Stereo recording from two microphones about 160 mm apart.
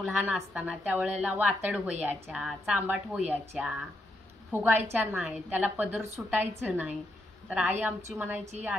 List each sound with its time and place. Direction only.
0.0 s a woman's voice: 5° right (ahead or behind)